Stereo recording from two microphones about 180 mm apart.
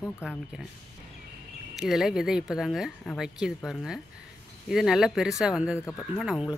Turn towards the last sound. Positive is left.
turn(degrees=-5)  # may be behind; listen again after turning